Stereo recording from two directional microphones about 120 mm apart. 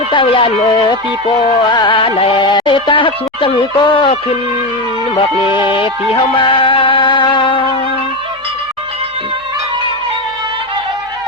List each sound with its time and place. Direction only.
0.1 s speech: 45° left (ahead or behind)
6.3 s speech: 45° left (ahead or behind)